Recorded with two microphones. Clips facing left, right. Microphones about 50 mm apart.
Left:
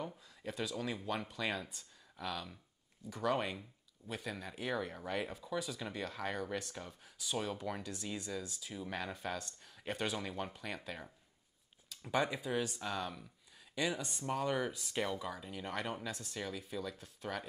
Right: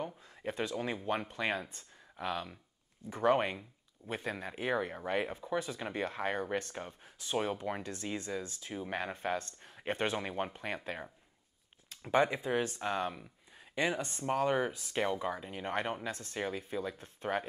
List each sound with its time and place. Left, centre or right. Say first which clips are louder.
0.4 s speech: right 4 dB; right